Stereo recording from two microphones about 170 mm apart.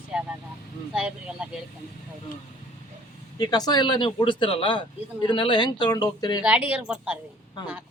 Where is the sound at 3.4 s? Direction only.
25° left (ahead or behind).